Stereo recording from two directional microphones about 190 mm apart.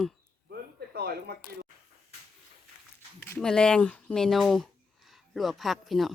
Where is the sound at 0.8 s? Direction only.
55° right (ahead or behind).